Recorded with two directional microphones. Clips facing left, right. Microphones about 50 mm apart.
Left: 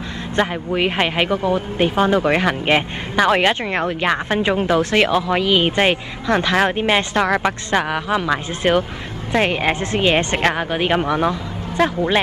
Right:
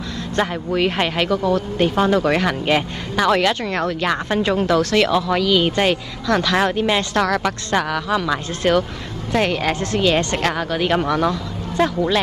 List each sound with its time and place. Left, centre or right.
0.4 s speech: centre